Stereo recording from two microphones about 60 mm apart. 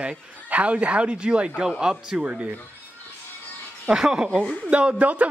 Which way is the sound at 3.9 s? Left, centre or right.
Centre.